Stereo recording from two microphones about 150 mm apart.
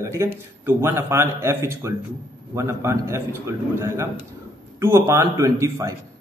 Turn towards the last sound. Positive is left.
turn(degrees=-20)  # may be behind; listen again after turning